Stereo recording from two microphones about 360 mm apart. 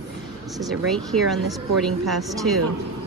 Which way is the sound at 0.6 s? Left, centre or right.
Centre.